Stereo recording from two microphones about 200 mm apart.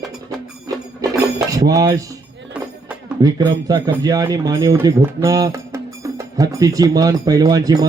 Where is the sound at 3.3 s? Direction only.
20° right (ahead or behind).